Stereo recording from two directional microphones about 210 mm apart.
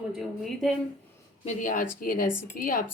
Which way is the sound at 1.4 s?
40° left (ahead or behind).